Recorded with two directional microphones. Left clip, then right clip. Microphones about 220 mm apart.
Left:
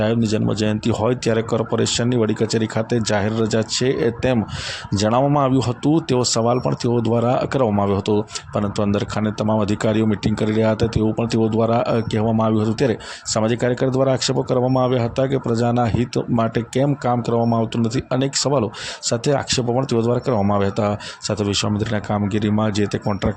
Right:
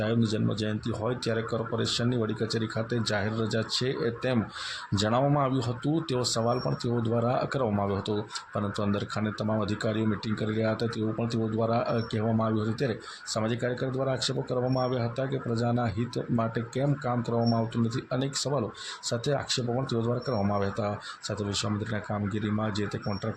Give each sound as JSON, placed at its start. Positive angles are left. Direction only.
{"t": 0.0, "sound": "speech", "side_deg": 35}